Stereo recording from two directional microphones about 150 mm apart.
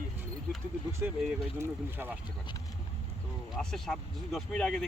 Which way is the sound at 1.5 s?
15° right (ahead or behind).